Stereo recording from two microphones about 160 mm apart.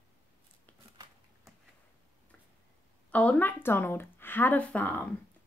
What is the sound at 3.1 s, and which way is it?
Speech, 10° left (ahead or behind).